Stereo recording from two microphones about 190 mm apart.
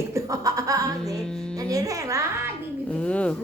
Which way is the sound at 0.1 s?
15° right (ahead or behind).